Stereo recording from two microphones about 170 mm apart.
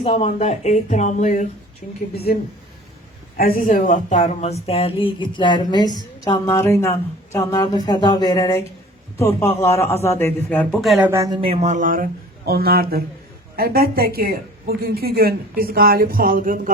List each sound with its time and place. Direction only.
0.0 s speech: 35° left (ahead or behind)
3.3 s a man's voice: 55° left (ahead or behind); by 6.9 s 15° left (ahead or behind)
7.3 s a sound: 20° left (ahead or behind)
9.1 s a man's voice: 15° left (ahead or behind); by 11.1 s centre (ahead or behind)
11.1 s speech: 20° right (ahead or behind)
11.3 s speech: 35° right (ahead or behind); by 12.0 s 50° right (ahead or behind)
12.5 s a woman's voice: 65° right (ahead or behind)